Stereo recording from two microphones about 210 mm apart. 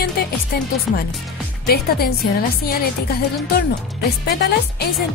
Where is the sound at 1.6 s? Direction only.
45° left (ahead or behind).